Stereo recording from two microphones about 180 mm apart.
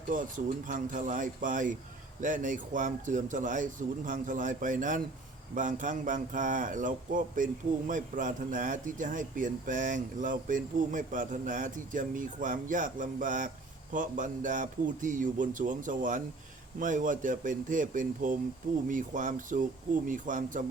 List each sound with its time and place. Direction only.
0.1 s a man's voice: 45° right (ahead or behind)